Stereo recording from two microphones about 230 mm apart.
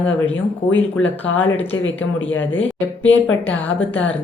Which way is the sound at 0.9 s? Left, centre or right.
Left.